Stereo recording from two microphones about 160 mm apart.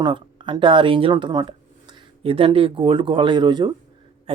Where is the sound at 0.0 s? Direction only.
30° right (ahead or behind).